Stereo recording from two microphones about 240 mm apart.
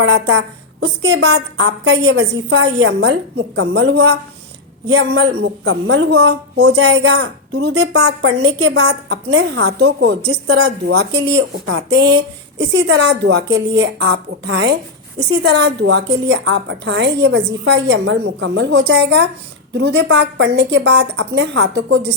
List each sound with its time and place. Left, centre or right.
0.0 s a woman's voice: right
4.9 s a woman's voice: right
7.9 s a woman's voice: right
8.3 s a woman's voice: right
9.8 s a woman's voice: right